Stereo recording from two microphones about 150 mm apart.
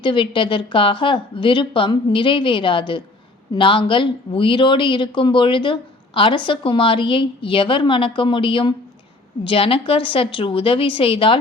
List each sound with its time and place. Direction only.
0.0 s speech: 35° left (ahead or behind)